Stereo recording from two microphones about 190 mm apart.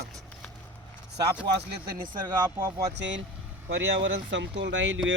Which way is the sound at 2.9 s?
70° right (ahead or behind).